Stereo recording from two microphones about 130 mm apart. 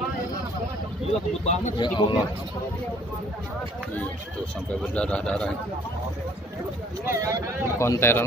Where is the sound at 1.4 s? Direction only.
60° left (ahead or behind).